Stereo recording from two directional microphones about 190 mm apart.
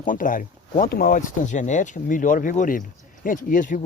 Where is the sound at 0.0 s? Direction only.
45° left (ahead or behind).